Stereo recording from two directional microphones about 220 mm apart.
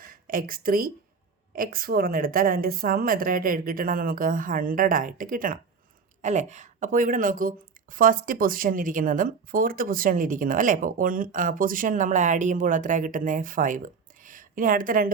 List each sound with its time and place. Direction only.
0.0 s a woman's voice: 40° right (ahead or behind)